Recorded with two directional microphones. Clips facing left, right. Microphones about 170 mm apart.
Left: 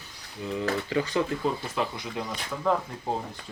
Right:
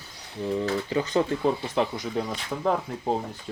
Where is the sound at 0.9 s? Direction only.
25° right (ahead or behind).